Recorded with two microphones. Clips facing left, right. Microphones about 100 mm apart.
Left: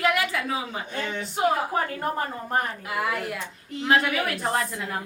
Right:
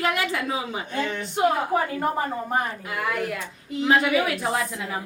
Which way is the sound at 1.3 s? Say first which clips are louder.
Right 2 dB; centre (ahead or behind).